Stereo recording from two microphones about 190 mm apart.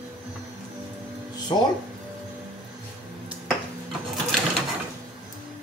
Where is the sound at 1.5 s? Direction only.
25° left (ahead or behind).